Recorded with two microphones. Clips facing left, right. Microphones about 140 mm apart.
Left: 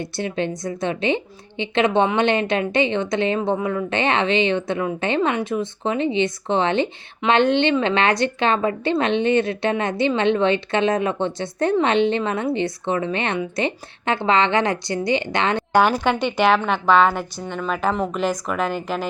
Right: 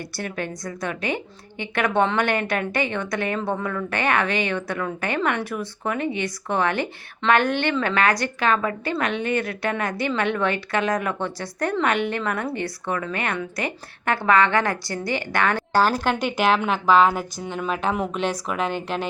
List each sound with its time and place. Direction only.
0.0 s a woman's voice: 20° left (ahead or behind)
16.2 s a woman's voice: centre (ahead or behind)